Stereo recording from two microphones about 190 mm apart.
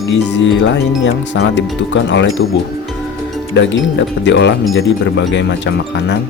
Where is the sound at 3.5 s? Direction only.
75° left (ahead or behind).